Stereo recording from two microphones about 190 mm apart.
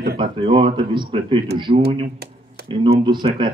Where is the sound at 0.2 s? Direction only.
25° right (ahead or behind).